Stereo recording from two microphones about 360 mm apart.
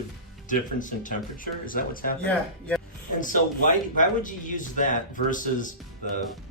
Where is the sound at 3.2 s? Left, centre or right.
Left.